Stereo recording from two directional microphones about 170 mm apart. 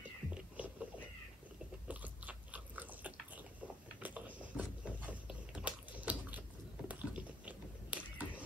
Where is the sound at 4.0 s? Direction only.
10° right (ahead or behind).